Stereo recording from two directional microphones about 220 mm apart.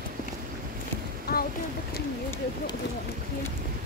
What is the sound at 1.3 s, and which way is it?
Boat, 45° left (ahead or behind).